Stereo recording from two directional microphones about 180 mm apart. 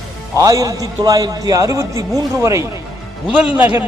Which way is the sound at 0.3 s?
20° right (ahead or behind).